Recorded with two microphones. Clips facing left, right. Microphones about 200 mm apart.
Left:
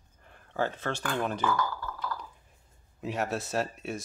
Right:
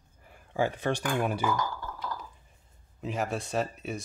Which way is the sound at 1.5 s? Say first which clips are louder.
Left 1 dB; 20° right (ahead or behind).